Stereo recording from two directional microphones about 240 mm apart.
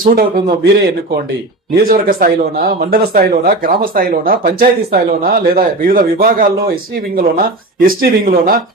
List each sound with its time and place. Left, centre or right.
0.0 s speech: right
1.7 s speech: right